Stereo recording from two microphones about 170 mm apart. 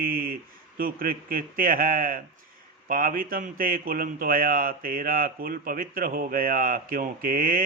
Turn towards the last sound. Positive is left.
turn(degrees=-55)  # may be behind; listen again after turning